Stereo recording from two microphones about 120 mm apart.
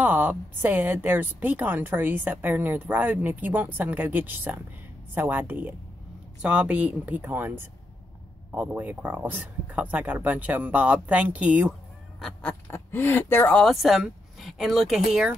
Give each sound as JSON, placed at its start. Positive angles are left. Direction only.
{"t": 0.0, "sound": "speech", "side_deg": -15}
{"t": 12.2, "sound": "duck", "side_deg": 5}
{"t": 12.6, "sound": "speech", "side_deg": 20}
{"t": 13.6, "sound": "speech", "side_deg": 0}